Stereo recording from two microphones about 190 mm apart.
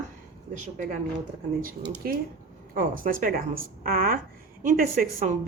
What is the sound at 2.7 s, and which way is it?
A woman's voice, 45° right (ahead or behind).